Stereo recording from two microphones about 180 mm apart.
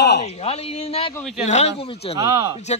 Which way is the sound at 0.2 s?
35° left (ahead or behind).